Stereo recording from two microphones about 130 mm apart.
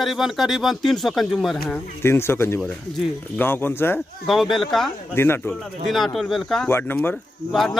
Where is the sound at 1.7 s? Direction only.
20° left (ahead or behind).